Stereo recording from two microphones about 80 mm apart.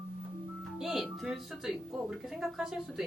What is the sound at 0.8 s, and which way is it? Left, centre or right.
A woman's voice, centre.